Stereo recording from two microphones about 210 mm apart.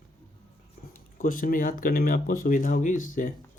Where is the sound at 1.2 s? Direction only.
40° left (ahead or behind).